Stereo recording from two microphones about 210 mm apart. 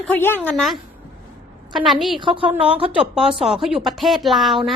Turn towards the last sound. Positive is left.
turn(degrees=0)  # may be behind; listen again after turning